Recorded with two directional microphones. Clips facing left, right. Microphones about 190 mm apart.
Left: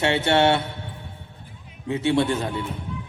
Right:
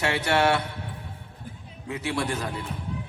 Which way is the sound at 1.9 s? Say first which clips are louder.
Left 7 dB; 25° left (ahead or behind).